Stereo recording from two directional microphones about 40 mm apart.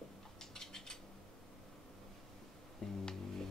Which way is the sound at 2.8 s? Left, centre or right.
Centre.